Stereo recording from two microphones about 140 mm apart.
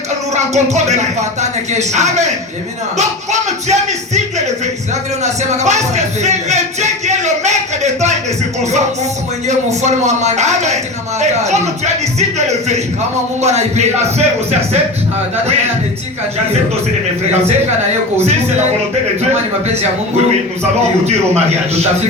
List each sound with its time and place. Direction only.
0.3 s speech: 55° right (ahead or behind)
3.7 s speech: 55° right (ahead or behind)
9.5 s speech: 55° right (ahead or behind)
19.6 s speech: 50° right (ahead or behind)